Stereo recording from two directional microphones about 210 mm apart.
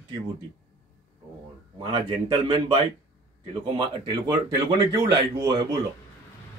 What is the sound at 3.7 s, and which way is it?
A man's voice, 20° right (ahead or behind).